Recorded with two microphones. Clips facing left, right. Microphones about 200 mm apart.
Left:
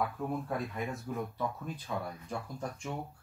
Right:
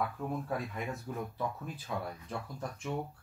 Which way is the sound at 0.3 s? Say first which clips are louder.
Left 1 dB; centre (ahead or behind).